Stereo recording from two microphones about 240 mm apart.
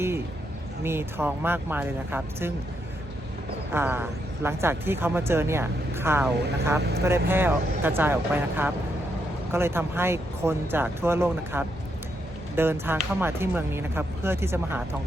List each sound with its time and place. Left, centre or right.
0.9 s speech: centre
3.8 s speech: centre